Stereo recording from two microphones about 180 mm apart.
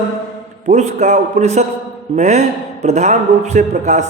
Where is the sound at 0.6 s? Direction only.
40° right (ahead or behind).